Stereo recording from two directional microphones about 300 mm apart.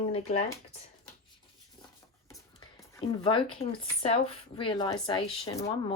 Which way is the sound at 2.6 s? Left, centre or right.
Centre.